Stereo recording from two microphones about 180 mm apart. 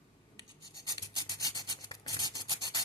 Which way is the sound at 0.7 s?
20° left (ahead or behind).